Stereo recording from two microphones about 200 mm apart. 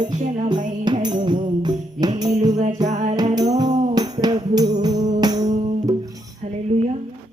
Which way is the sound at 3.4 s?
20° right (ahead or behind).